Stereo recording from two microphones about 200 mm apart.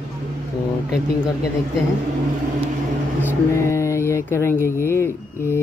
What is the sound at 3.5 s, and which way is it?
Speech, 15° left (ahead or behind).